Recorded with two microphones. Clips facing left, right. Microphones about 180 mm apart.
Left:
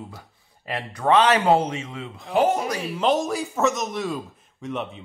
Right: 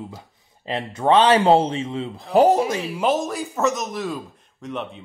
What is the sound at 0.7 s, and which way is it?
A man's voice, 25° right (ahead or behind).